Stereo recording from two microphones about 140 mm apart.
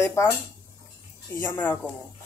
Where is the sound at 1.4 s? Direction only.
15° left (ahead or behind).